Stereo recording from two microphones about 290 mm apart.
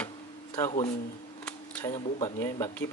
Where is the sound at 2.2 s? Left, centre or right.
Centre.